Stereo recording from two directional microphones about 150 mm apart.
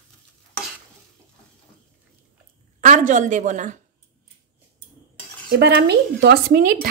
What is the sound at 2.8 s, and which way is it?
Speech, 55° right (ahead or behind).